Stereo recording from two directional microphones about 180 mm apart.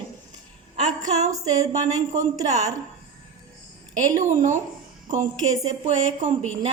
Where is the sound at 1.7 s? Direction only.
40° right (ahead or behind).